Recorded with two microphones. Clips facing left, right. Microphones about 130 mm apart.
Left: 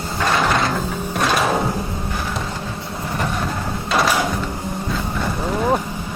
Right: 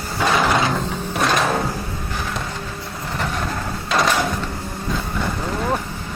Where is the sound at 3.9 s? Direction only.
5° left (ahead or behind).